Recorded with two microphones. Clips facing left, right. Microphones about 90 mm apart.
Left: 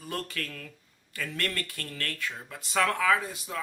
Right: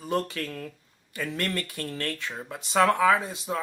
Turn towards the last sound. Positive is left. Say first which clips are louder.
# right 3 dB
turn(degrees=-25)  # may be behind; listen again after turning